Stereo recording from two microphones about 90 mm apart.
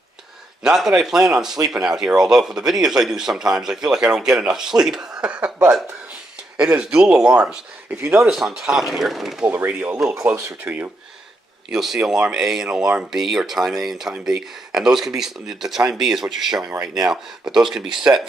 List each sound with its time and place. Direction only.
0.7 s speech: 5° right (ahead or behind)
7.9 s speech: 25° right (ahead or behind)
8.2 s speech: centre (ahead or behind)
9.5 s speech: 20° right (ahead or behind)
11.7 s speech: 5° right (ahead or behind)